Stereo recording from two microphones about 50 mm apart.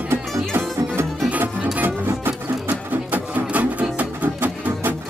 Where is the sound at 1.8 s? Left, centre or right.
Right.